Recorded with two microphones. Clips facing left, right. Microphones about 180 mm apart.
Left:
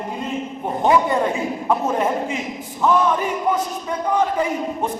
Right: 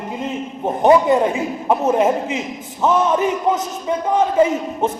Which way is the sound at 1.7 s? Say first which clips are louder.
Right 5 dB; 20° right (ahead or behind).